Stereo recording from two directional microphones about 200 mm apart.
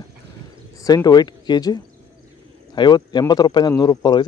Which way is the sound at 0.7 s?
20° left (ahead or behind).